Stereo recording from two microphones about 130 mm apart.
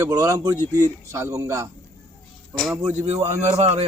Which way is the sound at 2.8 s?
55° right (ahead or behind).